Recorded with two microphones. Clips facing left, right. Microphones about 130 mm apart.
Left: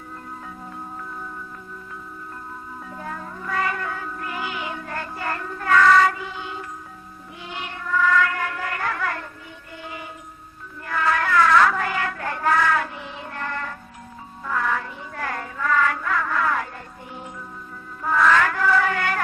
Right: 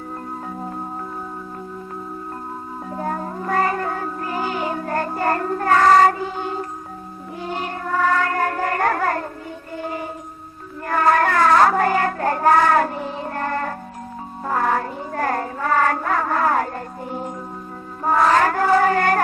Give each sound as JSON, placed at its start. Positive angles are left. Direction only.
{"t": 2.9, "sound": "music", "side_deg": -40}
{"t": 9.7, "sound": "mantra", "side_deg": -40}
{"t": 10.8, "sound": "child singing", "side_deg": -45}
{"t": 14.4, "sound": "music", "side_deg": -40}
{"t": 18.0, "sound": "a sound", "side_deg": -40}